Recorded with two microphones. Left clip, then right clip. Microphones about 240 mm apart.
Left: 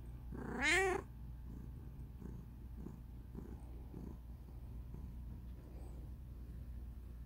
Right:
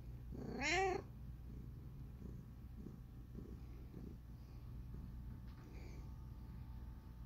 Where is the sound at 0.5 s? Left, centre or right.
Centre.